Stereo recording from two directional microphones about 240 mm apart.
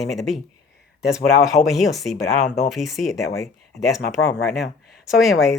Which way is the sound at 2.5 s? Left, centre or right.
Left.